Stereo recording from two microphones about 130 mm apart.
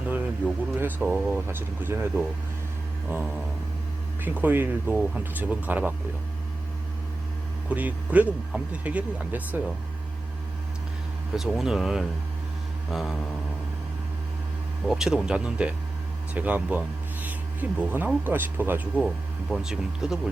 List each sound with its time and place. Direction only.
0.1 s speech: 15° right (ahead or behind)
4.2 s speech: 15° right (ahead or behind)
7.7 s speech: 10° right (ahead or behind)
11.3 s speech: 5° right (ahead or behind)
14.8 s speech: 5° right (ahead or behind)
19.0 s speech: centre (ahead or behind)